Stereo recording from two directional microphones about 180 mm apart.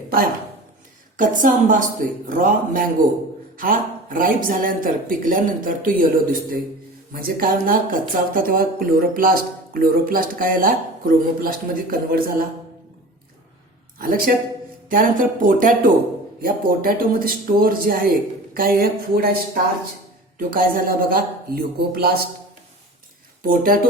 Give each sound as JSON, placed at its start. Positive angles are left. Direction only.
{"t": 1.1, "sound": "speech", "side_deg": -45}
{"t": 14.0, "sound": "speech", "side_deg": -50}
{"t": 20.5, "sound": "speech", "side_deg": -50}
{"t": 23.4, "sound": "speech", "side_deg": -50}